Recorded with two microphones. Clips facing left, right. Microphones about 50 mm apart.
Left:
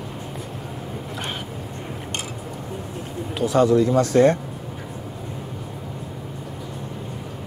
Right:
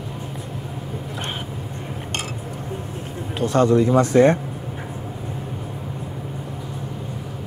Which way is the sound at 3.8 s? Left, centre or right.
Right.